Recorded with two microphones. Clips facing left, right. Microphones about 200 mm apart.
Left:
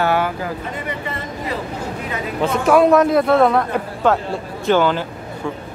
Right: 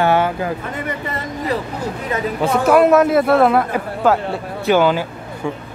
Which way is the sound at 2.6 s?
5° right (ahead or behind).